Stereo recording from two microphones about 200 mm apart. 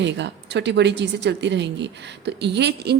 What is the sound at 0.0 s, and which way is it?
Speech, 60° right (ahead or behind).